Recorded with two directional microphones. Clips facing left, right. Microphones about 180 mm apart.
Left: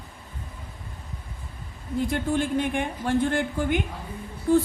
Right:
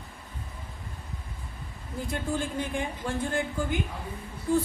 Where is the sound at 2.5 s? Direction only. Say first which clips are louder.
Left 6 dB; 65° left (ahead or behind).